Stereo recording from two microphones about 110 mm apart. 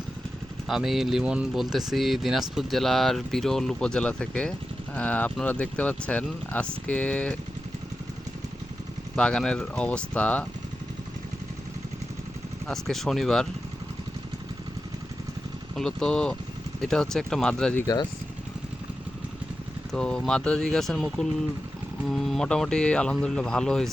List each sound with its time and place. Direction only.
0.7 s speech: centre (ahead or behind)
9.1 s speech: 10° left (ahead or behind)
12.6 s speech: 5° left (ahead or behind)
15.7 s speech: 5° left (ahead or behind)
17.8 s speech: 40° left (ahead or behind)
19.9 s speech: 5° left (ahead or behind)